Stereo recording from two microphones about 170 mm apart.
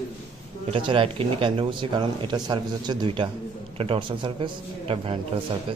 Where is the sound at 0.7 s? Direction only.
30° right (ahead or behind).